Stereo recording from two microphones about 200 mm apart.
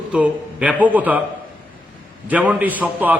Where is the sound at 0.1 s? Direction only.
5° right (ahead or behind).